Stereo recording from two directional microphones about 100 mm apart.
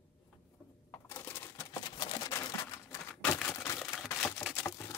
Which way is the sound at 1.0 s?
25° left (ahead or behind).